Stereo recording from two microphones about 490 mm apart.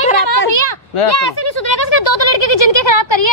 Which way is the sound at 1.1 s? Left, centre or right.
Left.